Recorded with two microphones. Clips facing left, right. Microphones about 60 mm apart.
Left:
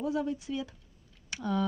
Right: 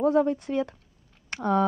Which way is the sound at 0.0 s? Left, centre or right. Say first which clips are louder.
Right 9 dB; right.